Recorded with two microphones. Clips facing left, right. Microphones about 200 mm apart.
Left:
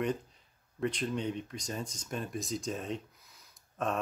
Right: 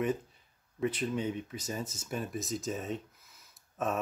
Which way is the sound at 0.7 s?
5° right (ahead or behind).